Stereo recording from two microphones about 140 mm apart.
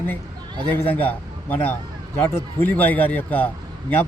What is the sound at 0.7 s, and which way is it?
A man's voice, 15° left (ahead or behind).